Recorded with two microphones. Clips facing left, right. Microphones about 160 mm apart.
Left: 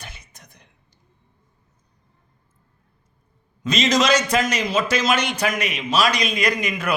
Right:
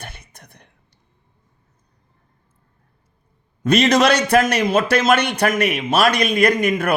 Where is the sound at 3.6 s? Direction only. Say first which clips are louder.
Right 5 dB; 60° right (ahead or behind).